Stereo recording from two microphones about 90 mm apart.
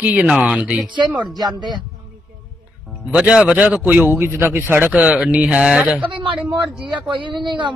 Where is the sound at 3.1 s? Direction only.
10° right (ahead or behind).